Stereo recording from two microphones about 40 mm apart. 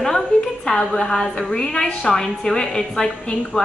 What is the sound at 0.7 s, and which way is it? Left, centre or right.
A woman's voice, centre.